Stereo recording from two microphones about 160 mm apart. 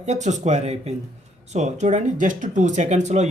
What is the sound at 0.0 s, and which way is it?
Speech, 45° right (ahead or behind).